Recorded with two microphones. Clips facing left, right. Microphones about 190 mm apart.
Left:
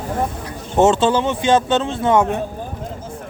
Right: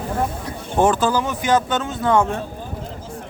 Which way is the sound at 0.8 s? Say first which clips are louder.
Left 3 dB; 25° left (ahead or behind).